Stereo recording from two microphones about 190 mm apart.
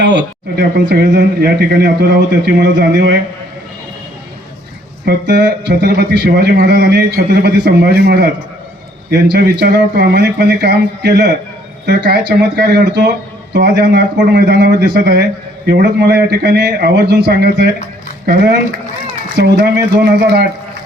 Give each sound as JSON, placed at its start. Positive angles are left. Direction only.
{"t": 0.0, "sound": "a man's voice", "side_deg": -70}
{"t": 5.0, "sound": "a man's voice", "side_deg": -65}
{"t": 19.4, "sound": "a man's voice", "side_deg": -60}